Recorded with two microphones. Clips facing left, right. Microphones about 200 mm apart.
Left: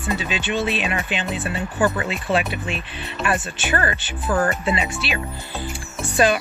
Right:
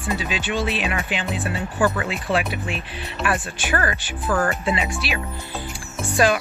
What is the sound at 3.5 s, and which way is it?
Speech, 10° right (ahead or behind).